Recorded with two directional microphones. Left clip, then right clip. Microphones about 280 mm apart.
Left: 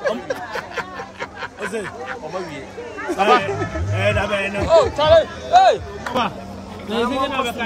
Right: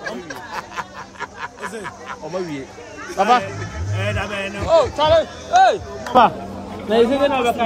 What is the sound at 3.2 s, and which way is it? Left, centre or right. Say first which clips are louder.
Speech: even; right.